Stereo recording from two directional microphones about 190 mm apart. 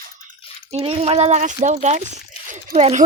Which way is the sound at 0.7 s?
30° right (ahead or behind).